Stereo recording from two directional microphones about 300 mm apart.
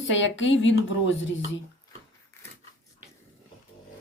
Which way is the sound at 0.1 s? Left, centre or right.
Left.